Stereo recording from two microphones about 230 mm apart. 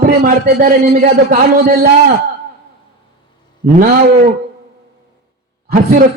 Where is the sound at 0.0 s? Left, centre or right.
Right.